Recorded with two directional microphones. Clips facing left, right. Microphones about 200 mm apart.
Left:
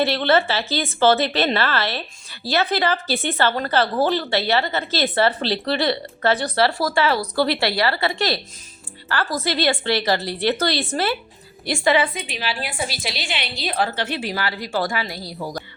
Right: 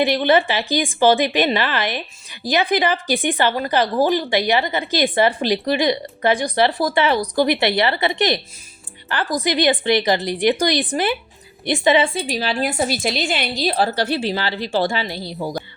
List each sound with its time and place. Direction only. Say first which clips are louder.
0.0 s a woman's voice: right 2 dB; 15° right (ahead or behind)